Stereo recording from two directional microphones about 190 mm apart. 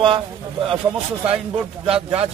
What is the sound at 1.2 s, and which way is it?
Speech, 30° right (ahead or behind).